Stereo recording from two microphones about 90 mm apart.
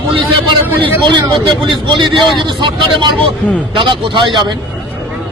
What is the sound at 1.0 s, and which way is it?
A man's voice, 60° right (ahead or behind).